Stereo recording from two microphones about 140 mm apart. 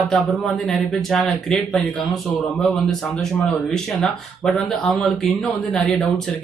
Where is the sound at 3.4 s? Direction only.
5° left (ahead or behind).